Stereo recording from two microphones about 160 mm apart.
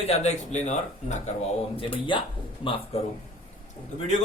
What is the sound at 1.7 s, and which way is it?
A man's voice, 35° left (ahead or behind).